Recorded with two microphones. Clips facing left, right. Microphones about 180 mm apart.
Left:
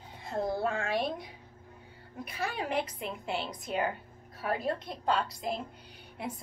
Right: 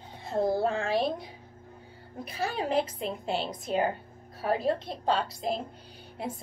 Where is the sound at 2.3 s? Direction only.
30° right (ahead or behind).